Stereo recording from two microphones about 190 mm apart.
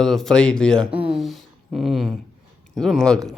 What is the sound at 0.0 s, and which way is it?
Speech, centre (ahead or behind).